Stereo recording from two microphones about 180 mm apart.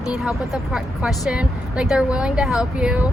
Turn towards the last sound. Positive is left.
turn(degrees=-5)  # may be behind; listen again after turning